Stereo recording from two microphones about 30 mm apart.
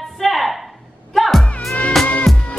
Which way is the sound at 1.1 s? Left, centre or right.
Centre.